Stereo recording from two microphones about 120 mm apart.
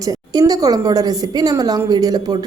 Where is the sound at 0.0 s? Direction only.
30° right (ahead or behind).